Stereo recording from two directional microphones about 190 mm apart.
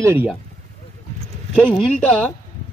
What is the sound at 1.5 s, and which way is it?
Speech, 5° left (ahead or behind).